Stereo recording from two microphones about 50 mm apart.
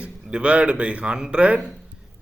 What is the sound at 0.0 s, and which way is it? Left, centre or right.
A man's voice, right.